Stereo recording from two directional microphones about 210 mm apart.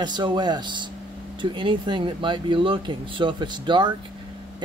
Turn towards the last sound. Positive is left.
turn(degrees=-20)  # may be behind; listen again after turning